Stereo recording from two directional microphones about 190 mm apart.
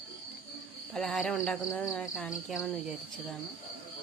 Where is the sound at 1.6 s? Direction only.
15° left (ahead or behind).